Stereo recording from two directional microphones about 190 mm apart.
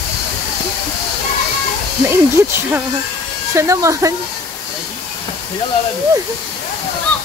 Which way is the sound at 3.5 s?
15° right (ahead or behind).